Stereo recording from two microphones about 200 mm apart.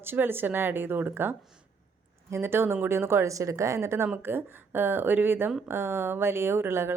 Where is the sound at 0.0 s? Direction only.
10° right (ahead or behind).